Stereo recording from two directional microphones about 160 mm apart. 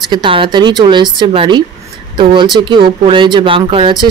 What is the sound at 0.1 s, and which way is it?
A woman's voice, 30° right (ahead or behind).